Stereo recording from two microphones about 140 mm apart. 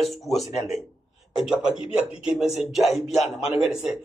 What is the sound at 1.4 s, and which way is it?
Speech, 5° right (ahead or behind).